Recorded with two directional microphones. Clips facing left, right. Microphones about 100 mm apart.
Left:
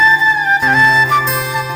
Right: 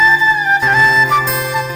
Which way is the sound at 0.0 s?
Centre (ahead or behind).